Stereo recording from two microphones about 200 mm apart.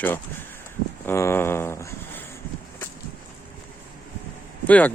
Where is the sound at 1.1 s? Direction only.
10° left (ahead or behind).